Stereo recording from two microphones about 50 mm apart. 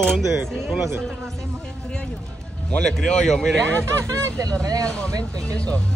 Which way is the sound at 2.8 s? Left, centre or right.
Centre.